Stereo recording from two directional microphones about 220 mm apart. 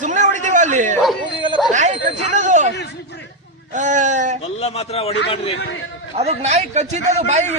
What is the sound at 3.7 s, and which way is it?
Speech, 35° right (ahead or behind).